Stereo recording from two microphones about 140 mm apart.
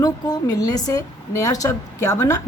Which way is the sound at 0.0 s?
25° left (ahead or behind).